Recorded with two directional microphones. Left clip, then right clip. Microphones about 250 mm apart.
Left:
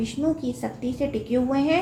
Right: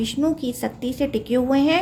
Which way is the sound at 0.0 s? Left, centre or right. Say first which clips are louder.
Right 3 dB; right.